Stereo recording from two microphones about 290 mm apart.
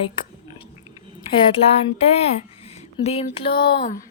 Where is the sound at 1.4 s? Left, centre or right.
Centre.